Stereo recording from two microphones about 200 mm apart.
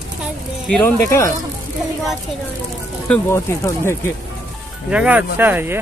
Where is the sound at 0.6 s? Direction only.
5° left (ahead or behind).